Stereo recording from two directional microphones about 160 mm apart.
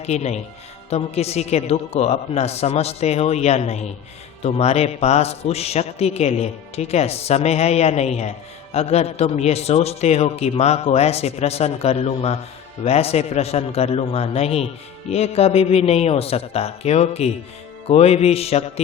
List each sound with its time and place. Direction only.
0.0 s a man's voice: 45° left (ahead or behind)